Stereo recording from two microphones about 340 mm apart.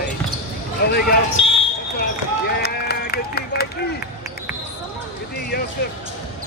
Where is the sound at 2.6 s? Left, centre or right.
Left.